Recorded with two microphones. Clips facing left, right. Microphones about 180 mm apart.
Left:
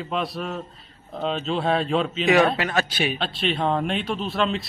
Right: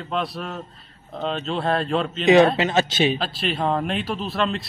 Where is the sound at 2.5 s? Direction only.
20° right (ahead or behind).